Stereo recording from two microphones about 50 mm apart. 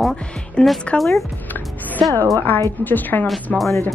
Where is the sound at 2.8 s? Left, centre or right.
Left.